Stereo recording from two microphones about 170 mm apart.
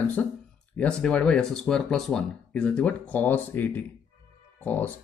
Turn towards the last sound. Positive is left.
turn(degrees=10)  # may be behind; listen again after turning